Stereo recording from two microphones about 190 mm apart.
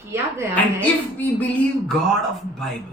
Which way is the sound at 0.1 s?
15° right (ahead or behind).